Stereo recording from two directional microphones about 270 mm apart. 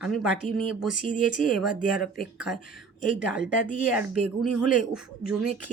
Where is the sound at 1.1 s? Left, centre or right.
Left.